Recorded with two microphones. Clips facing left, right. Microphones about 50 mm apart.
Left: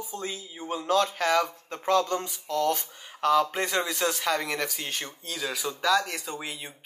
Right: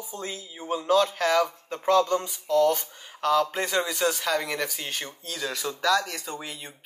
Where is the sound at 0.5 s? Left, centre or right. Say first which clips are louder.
Right 3 dB; centre.